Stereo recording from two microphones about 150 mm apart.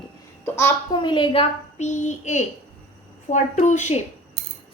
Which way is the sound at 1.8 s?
55° left (ahead or behind).